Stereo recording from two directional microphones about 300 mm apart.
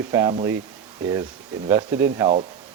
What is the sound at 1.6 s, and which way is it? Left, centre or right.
Speech, centre.